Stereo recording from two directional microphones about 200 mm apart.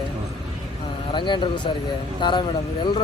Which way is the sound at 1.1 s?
25° left (ahead or behind).